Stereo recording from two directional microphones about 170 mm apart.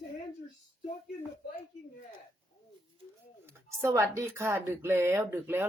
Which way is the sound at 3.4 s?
15° right (ahead or behind).